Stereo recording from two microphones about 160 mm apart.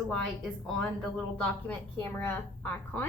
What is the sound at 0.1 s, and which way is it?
A woman's voice, 5° left (ahead or behind).